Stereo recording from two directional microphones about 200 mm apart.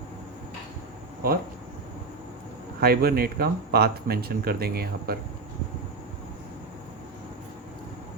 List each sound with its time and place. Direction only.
2.8 s speech: 50° right (ahead or behind)